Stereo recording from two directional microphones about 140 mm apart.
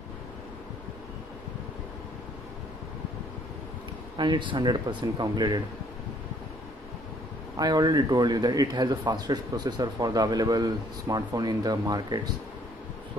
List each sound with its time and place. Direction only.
4.2 s speech: 35° right (ahead or behind)
7.5 s a man's voice: 30° right (ahead or behind)